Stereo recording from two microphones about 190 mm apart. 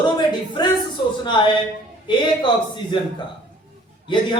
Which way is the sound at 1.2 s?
25° left (ahead or behind).